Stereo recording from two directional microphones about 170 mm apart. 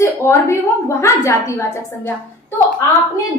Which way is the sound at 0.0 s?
15° left (ahead or behind).